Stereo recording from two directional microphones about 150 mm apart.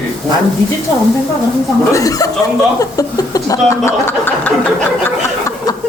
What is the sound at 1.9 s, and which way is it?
Speech, 25° left (ahead or behind).